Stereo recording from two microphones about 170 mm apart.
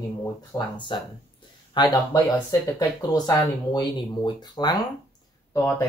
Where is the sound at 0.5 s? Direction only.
25° left (ahead or behind).